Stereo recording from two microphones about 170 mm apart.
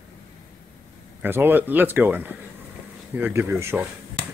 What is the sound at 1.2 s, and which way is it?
Speech, 10° right (ahead or behind).